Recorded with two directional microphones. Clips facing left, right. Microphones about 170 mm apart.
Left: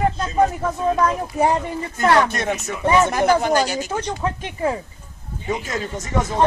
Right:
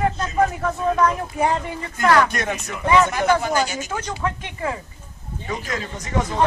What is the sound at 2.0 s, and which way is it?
Speech, 25° left (ahead or behind).